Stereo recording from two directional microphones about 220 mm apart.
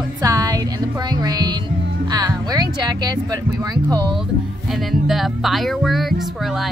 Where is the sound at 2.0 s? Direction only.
20° right (ahead or behind).